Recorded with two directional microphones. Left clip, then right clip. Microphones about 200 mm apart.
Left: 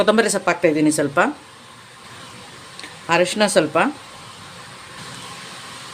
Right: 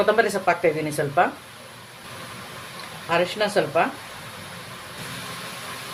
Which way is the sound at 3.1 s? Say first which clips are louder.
Left 5 dB; 65° left (ahead or behind).